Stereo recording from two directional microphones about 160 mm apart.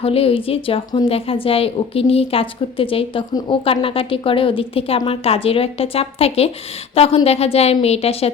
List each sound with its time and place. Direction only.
0.0 s a woman's voice: 35° left (ahead or behind)